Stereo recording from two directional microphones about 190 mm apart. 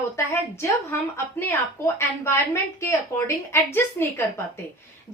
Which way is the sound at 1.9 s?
15° left (ahead or behind).